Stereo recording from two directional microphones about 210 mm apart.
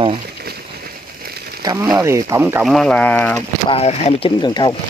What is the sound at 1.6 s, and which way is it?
Speech, 15° right (ahead or behind).